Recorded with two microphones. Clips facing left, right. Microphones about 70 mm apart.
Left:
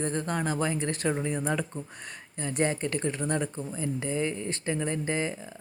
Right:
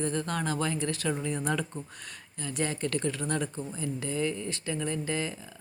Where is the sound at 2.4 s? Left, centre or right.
Left.